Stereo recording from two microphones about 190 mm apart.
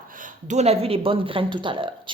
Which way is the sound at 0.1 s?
45° right (ahead or behind).